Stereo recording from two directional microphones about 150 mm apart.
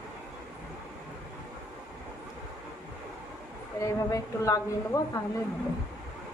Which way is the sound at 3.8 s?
20° left (ahead or behind).